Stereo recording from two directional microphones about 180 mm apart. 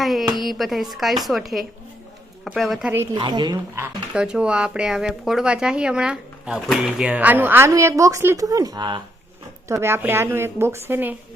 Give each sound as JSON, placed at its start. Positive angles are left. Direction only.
{"t": 0.0, "sound": "a sound", "side_deg": 0}
{"t": 0.3, "sound": "speech", "side_deg": 0}
{"t": 3.2, "sound": "speech", "side_deg": -25}
{"t": 4.1, "sound": "a woman's voice", "side_deg": -5}